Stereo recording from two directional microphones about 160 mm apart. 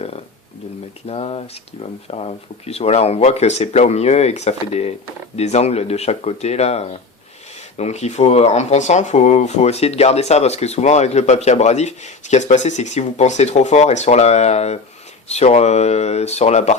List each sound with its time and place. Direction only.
1.0 s speech: 40° left (ahead or behind)